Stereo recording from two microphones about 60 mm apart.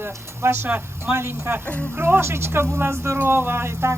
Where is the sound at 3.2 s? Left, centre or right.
Right.